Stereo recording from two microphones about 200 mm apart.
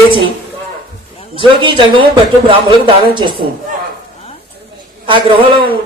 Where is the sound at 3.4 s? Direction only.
50° right (ahead or behind).